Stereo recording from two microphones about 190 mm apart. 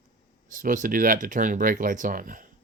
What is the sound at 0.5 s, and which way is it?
Speech, 45° right (ahead or behind).